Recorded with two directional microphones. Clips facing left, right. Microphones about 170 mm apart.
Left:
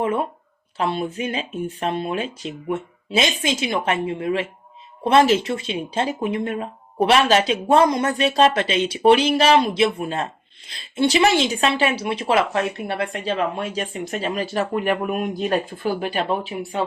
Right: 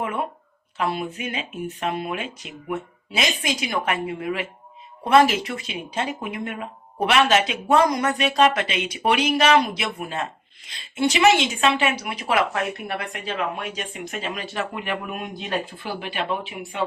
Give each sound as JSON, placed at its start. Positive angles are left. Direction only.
{"t": 0.0, "sound": "speech", "side_deg": 30}